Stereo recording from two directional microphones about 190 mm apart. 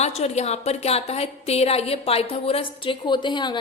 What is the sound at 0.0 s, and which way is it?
A woman's voice, 35° left (ahead or behind).